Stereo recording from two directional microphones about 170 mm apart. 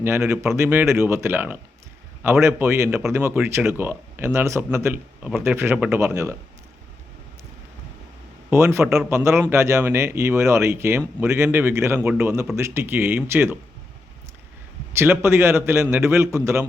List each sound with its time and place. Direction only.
0.0 s a man's voice: 15° right (ahead or behind)
8.4 s a man's voice: 15° right (ahead or behind)
14.9 s a man's voice: 15° right (ahead or behind)